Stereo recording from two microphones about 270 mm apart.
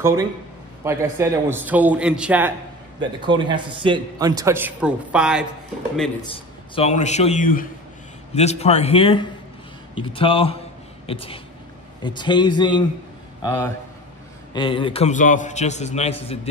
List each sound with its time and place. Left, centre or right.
0.0 s a man's voice: centre
3.0 s a man's voice: centre
6.3 s a man's voice: left